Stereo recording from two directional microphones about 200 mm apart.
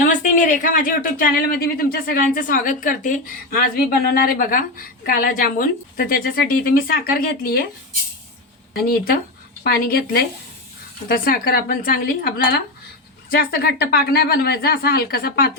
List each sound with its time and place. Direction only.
0.1 s speech: 40° left (ahead or behind)
8.7 s speech: 50° left (ahead or behind)